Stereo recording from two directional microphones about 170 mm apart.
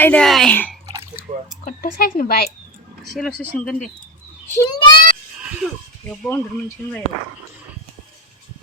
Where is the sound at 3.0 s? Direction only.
Centre (ahead or behind).